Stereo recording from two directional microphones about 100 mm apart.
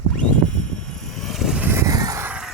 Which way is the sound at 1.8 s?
35° right (ahead or behind).